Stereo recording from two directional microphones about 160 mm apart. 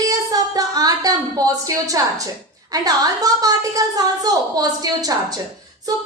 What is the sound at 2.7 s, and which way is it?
A woman's voice, 25° right (ahead or behind).